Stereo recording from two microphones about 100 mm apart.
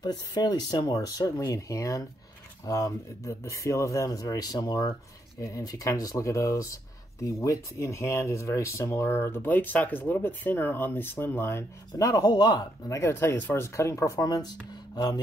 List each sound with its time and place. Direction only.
0.0 s speech: 45° left (ahead or behind); by 11.6 s 20° left (ahead or behind)
11.9 s speech: 40° left (ahead or behind)
12.9 s speech: 25° left (ahead or behind); by 15.1 s 45° left (ahead or behind)